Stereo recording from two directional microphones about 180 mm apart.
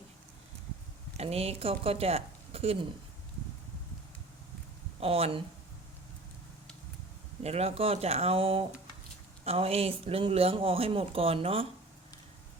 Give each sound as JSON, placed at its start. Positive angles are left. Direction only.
{"t": 1.1, "sound": "speech", "side_deg": -35}
{"t": 4.9, "sound": "speech", "side_deg": -35}
{"t": 7.4, "sound": "speech", "side_deg": -35}